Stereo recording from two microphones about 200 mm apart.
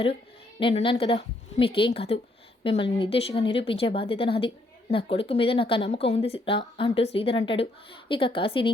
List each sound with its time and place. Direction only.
0.6 s a woman's voice: 25° left (ahead or behind)